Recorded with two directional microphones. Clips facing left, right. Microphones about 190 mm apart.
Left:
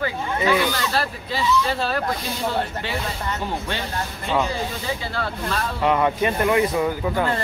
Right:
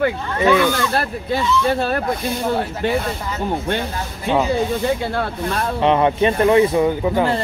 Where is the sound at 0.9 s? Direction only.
55° right (ahead or behind).